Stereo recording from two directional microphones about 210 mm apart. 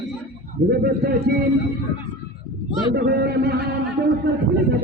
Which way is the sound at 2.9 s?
50° right (ahead or behind).